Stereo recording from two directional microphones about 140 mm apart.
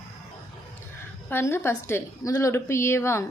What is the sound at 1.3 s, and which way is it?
A woman's voice, 15° left (ahead or behind).